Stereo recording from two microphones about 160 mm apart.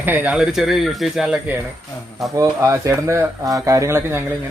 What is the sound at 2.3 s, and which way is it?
Speech, 20° right (ahead or behind).